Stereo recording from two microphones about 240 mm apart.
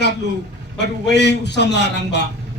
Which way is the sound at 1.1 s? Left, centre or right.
Left.